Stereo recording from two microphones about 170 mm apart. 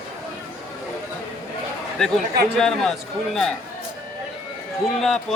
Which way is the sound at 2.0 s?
Centre (ahead or behind).